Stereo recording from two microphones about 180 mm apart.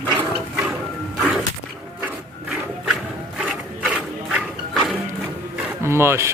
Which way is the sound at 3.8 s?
5° right (ahead or behind).